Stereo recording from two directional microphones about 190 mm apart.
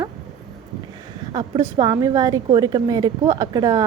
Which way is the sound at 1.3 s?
20° right (ahead or behind).